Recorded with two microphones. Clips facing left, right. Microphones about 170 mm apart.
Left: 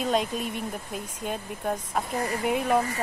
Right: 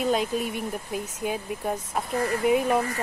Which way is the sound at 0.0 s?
Centre (ahead or behind).